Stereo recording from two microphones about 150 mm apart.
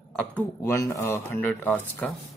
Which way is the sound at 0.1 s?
10° left (ahead or behind).